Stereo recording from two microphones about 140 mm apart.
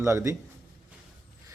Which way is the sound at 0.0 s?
20° right (ahead or behind).